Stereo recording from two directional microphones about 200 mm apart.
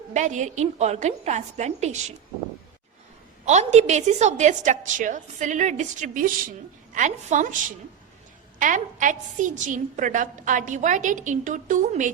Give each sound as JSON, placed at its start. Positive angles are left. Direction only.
{"t": 0.1, "sound": "a woman's voice", "side_deg": -35}
{"t": 3.4, "sound": "a woman's voice", "side_deg": -35}